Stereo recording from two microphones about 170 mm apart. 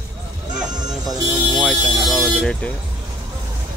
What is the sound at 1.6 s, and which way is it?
Vehicle, centre (ahead or behind).